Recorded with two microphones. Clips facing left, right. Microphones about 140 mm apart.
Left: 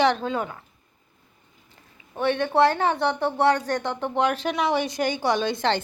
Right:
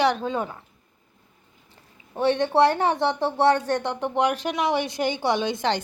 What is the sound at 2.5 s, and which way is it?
Speech, 15° right (ahead or behind).